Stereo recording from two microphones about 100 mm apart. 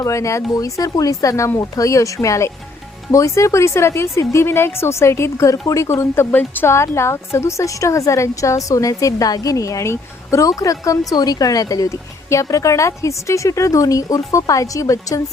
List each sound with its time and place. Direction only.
0.0 s speech: 30° left (ahead or behind)